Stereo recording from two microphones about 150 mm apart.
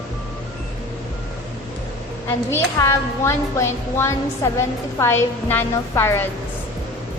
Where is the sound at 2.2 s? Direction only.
15° left (ahead or behind).